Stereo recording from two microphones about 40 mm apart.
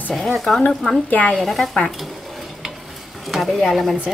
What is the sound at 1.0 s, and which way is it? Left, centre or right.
Speech, left.